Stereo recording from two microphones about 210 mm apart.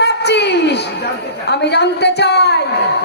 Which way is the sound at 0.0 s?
50° left (ahead or behind).